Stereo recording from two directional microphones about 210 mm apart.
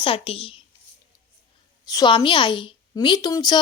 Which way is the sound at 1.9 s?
20° left (ahead or behind).